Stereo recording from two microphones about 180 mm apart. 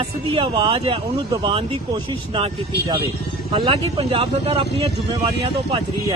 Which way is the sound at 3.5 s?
25° right (ahead or behind).